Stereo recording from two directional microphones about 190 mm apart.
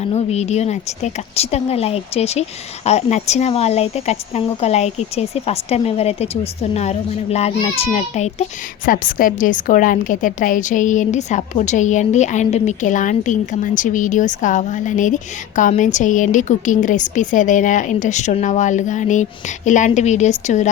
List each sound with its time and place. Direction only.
0.0 s a woman's voice: 35° left (ahead or behind)